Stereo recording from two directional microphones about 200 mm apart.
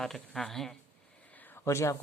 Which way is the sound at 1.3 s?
10° left (ahead or behind).